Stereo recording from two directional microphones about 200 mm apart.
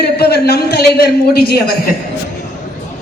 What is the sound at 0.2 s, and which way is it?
A man's voice, 55° left (ahead or behind).